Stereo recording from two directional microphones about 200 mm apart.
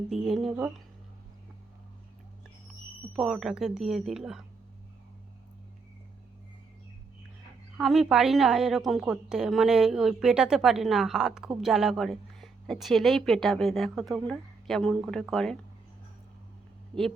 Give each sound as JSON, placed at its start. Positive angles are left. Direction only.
{"t": 0.1, "sound": "a woman's voice", "side_deg": 0}
{"t": 3.1, "sound": "a woman's voice", "side_deg": 0}
{"t": 7.8, "sound": "a woman's voice", "side_deg": 0}